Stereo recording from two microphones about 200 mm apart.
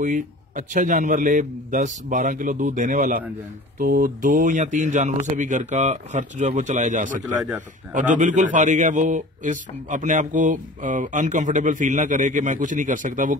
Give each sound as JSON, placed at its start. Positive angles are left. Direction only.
{"t": 0.0, "sound": "a man's voice", "side_deg": -40}